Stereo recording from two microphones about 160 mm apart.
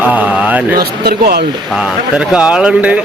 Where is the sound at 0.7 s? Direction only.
80° right.